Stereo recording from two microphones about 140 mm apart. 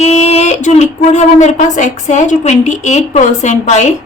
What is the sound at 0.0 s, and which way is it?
Speech, 50° left (ahead or behind).